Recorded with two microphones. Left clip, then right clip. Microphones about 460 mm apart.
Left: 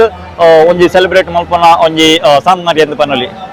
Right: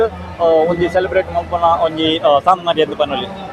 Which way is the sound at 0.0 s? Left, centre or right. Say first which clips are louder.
Left 8 dB; left.